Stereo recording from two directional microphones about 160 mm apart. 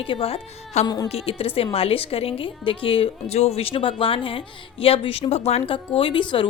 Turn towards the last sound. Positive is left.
turn(degrees=30)  # may be behind; listen again after turning